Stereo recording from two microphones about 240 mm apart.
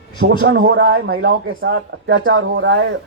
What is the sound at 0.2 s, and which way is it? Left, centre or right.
Speech, right.